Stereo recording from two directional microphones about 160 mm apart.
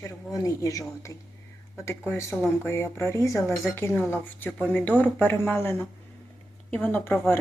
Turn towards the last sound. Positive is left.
turn(degrees=15)  # may be behind; listen again after turning